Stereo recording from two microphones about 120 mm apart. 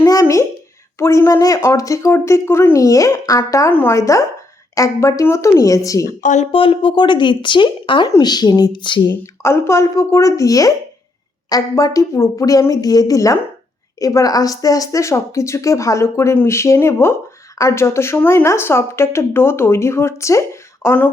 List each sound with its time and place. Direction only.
0.0 s a sound: 25° left (ahead or behind)
0.9 s speech: 20° left (ahead or behind)
6.2 s speech: 80° left
6.5 s speech: 50° left (ahead or behind)
9.4 s speech: 25° left (ahead or behind)